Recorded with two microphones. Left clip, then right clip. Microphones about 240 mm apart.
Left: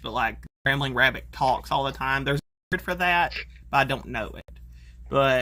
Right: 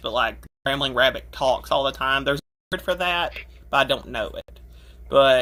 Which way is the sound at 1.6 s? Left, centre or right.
Left.